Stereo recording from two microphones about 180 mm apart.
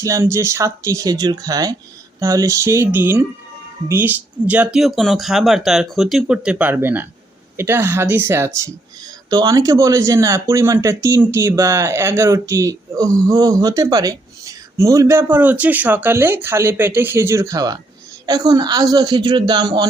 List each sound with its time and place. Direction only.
0.0 s speech: 15° right (ahead or behind)